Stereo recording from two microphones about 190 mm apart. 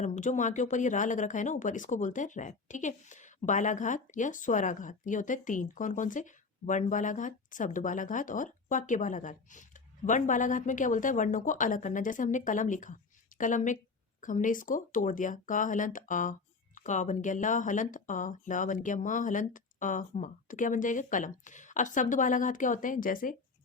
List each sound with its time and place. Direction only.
0.0 s speech: 40° left (ahead or behind)